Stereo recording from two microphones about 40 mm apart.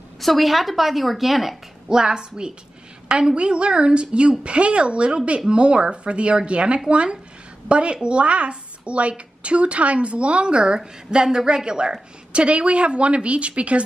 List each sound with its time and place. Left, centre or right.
0.2 s a woman's voice: centre
1.9 s speech: centre